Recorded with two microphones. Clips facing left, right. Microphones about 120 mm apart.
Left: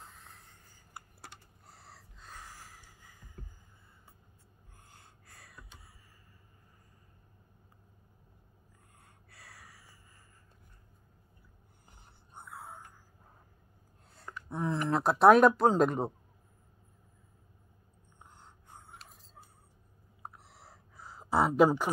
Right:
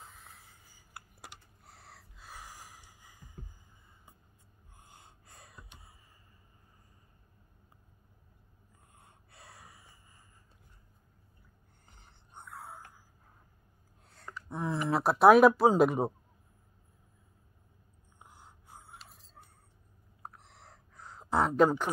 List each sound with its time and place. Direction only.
0.0 s computer keyboard: centre (ahead or behind)
4.7 s gasp: 20° right (ahead or behind)
9.0 s snort: 25° right (ahead or behind)
12.0 s a sound: centre (ahead or behind)
14.0 s speech: centre (ahead or behind)
18.2 s whispering: 10° right (ahead or behind)
20.2 s a sound: 5° left (ahead or behind)